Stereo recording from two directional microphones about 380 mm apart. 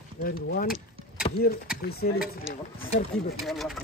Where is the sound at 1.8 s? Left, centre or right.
Left.